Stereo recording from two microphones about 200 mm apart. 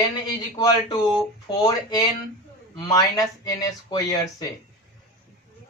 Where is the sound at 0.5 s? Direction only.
20° left (ahead or behind).